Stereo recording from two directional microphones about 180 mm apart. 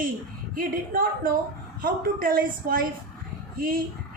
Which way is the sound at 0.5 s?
50° right (ahead or behind).